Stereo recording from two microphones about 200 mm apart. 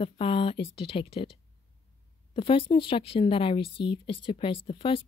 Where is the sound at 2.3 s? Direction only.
25° left (ahead or behind).